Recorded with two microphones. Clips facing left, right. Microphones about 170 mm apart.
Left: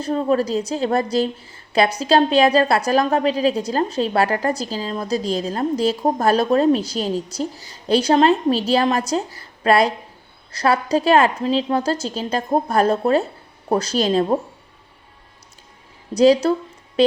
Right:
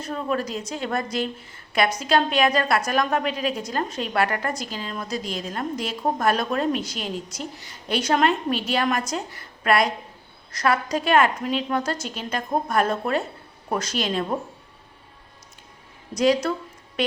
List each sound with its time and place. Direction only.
0.0 s a woman's voice: 30° left (ahead or behind)
16.1 s a woman's voice: 30° left (ahead or behind)